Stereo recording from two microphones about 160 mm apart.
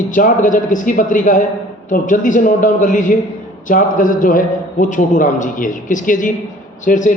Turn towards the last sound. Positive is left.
turn(degrees=50)  # may be behind; listen again after turning